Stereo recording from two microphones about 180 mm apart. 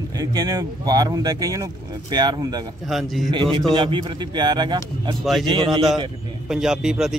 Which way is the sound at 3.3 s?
30° right (ahead or behind).